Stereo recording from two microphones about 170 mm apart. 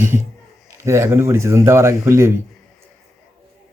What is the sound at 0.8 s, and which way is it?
Speech, 15° right (ahead or behind).